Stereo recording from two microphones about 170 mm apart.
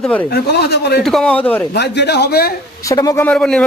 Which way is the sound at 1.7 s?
75° left (ahead or behind).